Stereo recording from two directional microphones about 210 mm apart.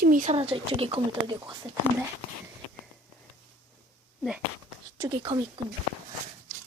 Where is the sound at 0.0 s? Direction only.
40° right (ahead or behind); by 1.5 s 25° right (ahead or behind).